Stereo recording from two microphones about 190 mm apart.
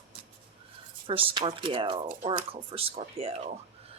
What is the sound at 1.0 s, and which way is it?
A woman's voice, 30° right (ahead or behind).